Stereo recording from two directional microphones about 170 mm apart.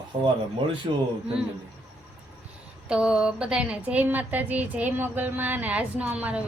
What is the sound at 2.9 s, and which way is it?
Speech, 5° right (ahead or behind).